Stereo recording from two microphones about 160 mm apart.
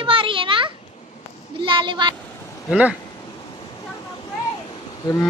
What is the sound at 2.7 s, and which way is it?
Speech, 5° right (ahead or behind).